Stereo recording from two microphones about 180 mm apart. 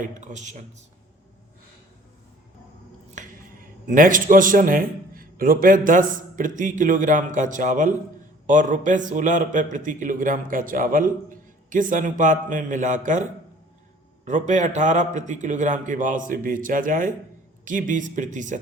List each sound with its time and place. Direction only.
0.0 s a man's voice: 45° right (ahead or behind)
3.2 s a sound: 45° right (ahead or behind)
3.8 s a man's voice: 50° right (ahead or behind)
14.3 s a man's voice: 40° right (ahead or behind)